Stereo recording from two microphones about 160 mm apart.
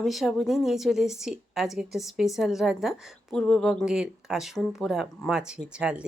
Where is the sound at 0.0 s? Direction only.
Centre (ahead or behind).